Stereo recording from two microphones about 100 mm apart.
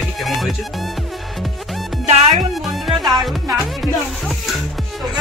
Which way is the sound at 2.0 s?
90° right.